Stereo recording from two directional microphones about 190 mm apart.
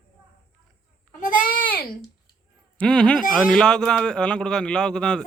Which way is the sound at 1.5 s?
50° left (ahead or behind).